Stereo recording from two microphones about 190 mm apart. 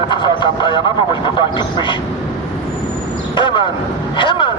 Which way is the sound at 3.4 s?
25° left (ahead or behind).